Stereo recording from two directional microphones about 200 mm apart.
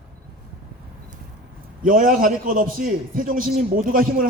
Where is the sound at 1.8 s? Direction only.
45° right (ahead or behind).